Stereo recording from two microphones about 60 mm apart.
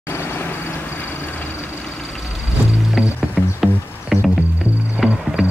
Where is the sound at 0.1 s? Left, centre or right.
Left.